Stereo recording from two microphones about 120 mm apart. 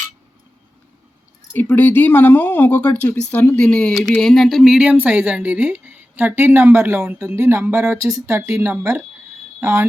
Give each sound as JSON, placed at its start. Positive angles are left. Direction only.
{"t": 1.5, "sound": "speech", "side_deg": 15}